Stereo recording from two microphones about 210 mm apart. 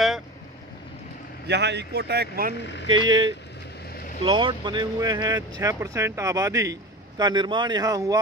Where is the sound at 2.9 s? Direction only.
20° right (ahead or behind).